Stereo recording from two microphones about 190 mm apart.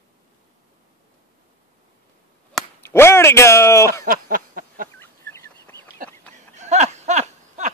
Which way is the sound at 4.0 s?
50° right (ahead or behind).